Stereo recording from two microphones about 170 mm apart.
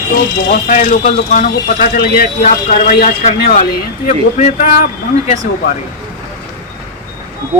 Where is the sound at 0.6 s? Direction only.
50° left (ahead or behind).